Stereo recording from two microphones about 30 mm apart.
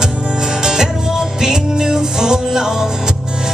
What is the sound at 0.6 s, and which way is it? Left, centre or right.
Music, right.